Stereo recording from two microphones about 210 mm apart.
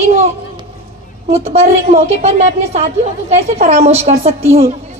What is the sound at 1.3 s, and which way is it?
A woman's voice, 30° right (ahead or behind).